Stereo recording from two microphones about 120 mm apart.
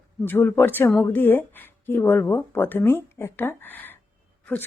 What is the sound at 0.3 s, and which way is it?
A woman's voice, 20° left (ahead or behind).